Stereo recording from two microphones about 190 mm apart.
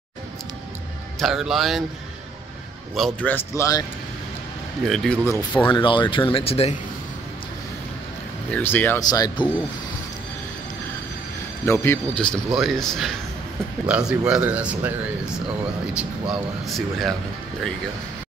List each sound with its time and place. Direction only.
1.2 s speech: centre (ahead or behind)
2.9 s speech: 5° left (ahead or behind)
4.8 s speech: centre (ahead or behind)
5.5 s speech: 25° left (ahead or behind)
8.5 s speech: 10° left (ahead or behind)
11.6 s speech: 15° left (ahead or behind)